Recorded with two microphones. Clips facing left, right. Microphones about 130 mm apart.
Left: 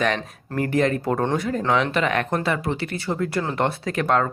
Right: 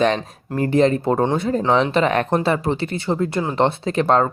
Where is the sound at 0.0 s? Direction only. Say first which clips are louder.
Right 5 dB; 25° right (ahead or behind).